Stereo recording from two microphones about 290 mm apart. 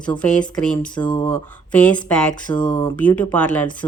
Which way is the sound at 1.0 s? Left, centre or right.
Centre.